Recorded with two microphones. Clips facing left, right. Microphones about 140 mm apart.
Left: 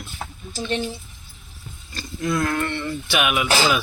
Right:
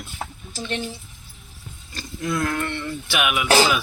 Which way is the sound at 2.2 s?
Centre (ahead or behind).